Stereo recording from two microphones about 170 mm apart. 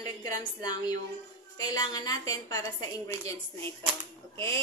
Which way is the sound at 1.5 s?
20° left (ahead or behind).